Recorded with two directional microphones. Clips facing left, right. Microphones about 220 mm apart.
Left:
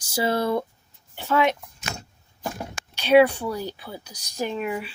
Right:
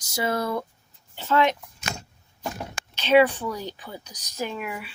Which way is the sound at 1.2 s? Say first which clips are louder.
Even; 10° left (ahead or behind).